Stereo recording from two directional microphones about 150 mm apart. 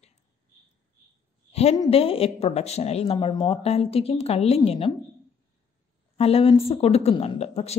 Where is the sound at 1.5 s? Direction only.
45° left (ahead or behind).